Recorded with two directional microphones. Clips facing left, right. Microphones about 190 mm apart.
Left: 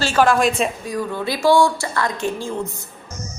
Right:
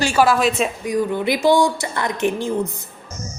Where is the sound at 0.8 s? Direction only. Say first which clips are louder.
Right 4 dB; 20° right (ahead or behind).